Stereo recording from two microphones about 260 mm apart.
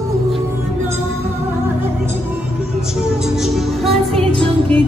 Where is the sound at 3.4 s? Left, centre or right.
Centre.